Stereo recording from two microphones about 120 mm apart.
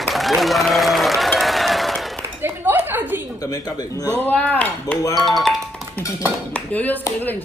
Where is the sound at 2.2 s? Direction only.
15° right (ahead or behind).